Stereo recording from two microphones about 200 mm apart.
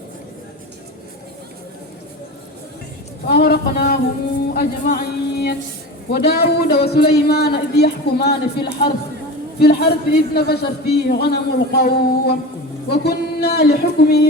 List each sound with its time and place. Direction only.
3.4 s a man's voice: 50° left (ahead or behind)